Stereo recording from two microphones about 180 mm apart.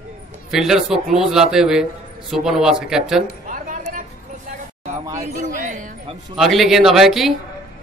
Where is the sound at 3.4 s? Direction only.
50° right (ahead or behind).